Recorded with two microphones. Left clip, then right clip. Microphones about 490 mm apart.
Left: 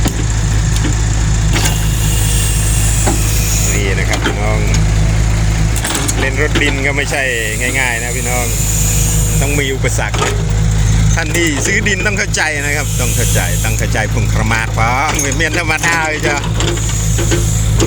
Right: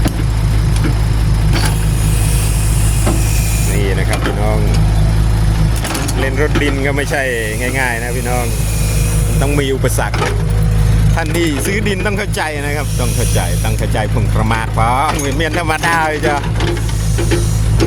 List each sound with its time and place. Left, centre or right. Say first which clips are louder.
6.2 s vehicle: left 1 dB; right
9.4 s music: right 1 dB; right
11.2 s music: left 2 dB; right
13.9 s speech: left 1 dB; right